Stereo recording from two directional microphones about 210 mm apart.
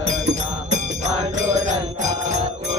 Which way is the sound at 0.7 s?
35° right (ahead or behind).